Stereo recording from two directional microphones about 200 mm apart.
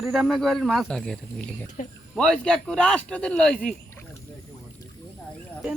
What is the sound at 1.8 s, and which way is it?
Speech, 40° left (ahead or behind).